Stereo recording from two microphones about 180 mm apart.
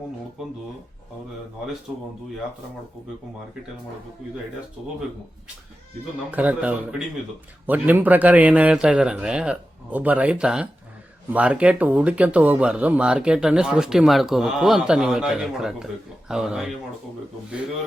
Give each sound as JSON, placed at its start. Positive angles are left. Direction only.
{"t": 6.3, "sound": "a man's voice", "side_deg": -10}